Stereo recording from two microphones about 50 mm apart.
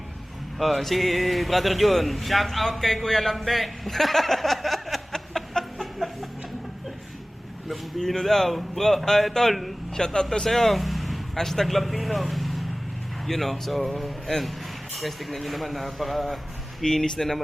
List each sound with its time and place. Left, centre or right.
0.6 s speech: centre
7.7 s speech: centre